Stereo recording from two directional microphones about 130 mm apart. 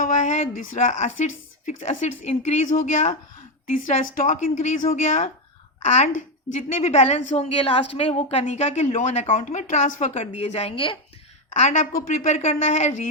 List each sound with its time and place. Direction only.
0.0 s speech: 70° left (ahead or behind)
3.7 s speech: 90° left; by 5.3 s 70° left (ahead or behind)
5.8 s a woman's voice: 60° left (ahead or behind)
11.5 s a woman's voice: 70° left (ahead or behind)